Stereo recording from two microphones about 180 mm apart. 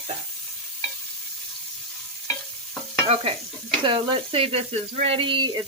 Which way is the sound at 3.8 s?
30° right (ahead or behind).